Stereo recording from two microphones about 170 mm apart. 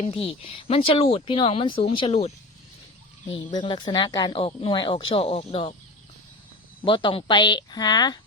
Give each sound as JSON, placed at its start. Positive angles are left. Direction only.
{"t": 0.3, "sound": "speech", "side_deg": 30}
{"t": 3.5, "sound": "speech", "side_deg": 30}
{"t": 6.8, "sound": "speech", "side_deg": 30}